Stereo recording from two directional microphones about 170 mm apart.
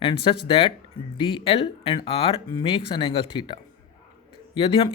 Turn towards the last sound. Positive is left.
turn(degrees=30)  # may be behind; listen again after turning